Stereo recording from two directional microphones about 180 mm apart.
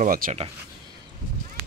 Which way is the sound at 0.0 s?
50° right (ahead or behind).